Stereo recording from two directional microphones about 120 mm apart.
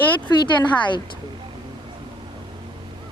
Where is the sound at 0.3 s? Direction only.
40° left (ahead or behind).